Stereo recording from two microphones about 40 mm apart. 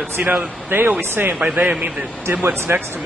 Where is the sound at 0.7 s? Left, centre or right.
Right.